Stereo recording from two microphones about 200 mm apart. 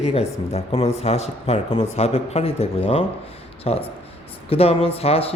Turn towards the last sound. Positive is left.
turn(degrees=30)  # may be behind; listen again after turning